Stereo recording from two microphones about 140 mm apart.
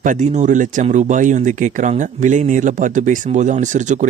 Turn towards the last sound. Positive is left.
turn(degrees=-60)  # may be behind; listen again after turning